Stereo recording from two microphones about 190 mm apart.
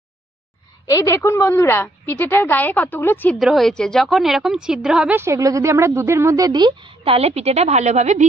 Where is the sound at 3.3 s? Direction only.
Centre (ahead or behind).